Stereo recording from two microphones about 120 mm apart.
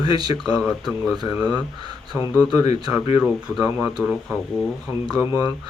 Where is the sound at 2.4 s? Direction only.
30° right (ahead or behind).